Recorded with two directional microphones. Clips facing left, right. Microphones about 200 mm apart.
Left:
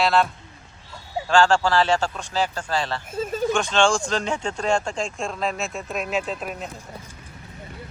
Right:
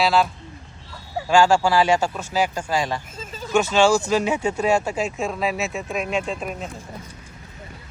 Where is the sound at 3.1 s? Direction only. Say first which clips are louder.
Left 11 dB; 55° left (ahead or behind).